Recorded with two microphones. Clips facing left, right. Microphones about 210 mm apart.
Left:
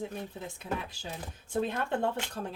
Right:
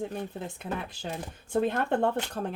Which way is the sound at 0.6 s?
60° right (ahead or behind).